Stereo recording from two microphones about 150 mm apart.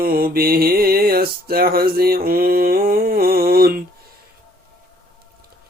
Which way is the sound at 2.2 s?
75° right (ahead or behind).